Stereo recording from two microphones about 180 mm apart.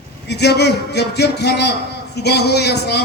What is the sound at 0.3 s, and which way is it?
A man's voice, 70° left (ahead or behind).